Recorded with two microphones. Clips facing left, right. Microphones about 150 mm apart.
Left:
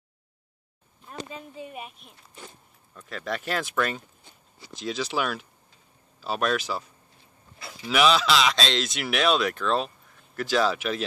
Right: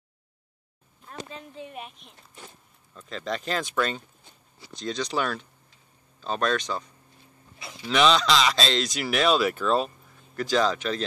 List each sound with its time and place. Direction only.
1.0 s speech: 5° left (ahead or behind)
4.7 s speech: 5° left (ahead or behind)